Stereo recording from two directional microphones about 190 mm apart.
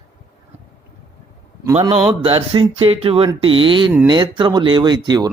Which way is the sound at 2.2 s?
30° right (ahead or behind).